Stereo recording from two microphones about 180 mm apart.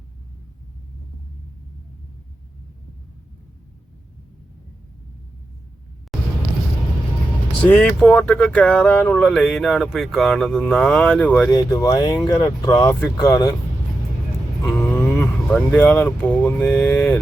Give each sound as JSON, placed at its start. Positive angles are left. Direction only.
{"t": 7.7, "sound": "speech", "side_deg": 5}
{"t": 11.5, "sound": "speech", "side_deg": 20}
{"t": 14.8, "sound": "speech", "side_deg": 10}